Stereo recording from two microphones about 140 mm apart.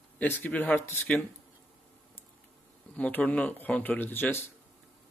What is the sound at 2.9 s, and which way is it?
Speech, 10° left (ahead or behind).